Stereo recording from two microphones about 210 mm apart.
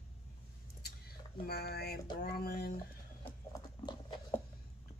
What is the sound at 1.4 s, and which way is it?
Speech, 45° left (ahead or behind).